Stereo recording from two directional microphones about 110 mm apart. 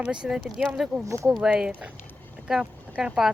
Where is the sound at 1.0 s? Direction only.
30° right (ahead or behind).